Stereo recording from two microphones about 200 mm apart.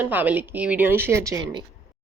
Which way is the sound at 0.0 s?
10° right (ahead or behind).